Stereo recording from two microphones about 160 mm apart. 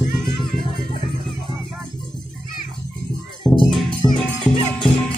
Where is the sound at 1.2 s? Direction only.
5° right (ahead or behind).